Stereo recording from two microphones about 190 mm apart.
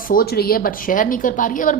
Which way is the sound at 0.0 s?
50° left (ahead or behind).